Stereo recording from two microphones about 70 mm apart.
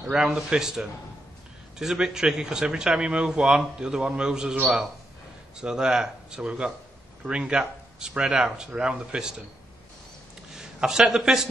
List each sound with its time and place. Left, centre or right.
0.1 s a man's voice: centre
5.6 s a man's voice: centre
10.5 s a man's voice: centre